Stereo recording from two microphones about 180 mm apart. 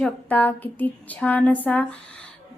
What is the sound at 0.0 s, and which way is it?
A woman's voice, 10° left (ahead or behind).